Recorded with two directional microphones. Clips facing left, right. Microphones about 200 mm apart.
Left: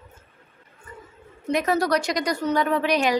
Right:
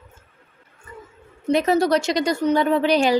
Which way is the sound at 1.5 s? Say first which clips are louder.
Right 4 dB; 30° right (ahead or behind).